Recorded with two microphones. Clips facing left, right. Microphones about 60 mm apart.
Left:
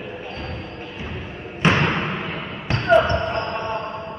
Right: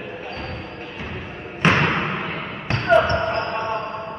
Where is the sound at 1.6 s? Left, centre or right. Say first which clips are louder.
Right 1 dB; right.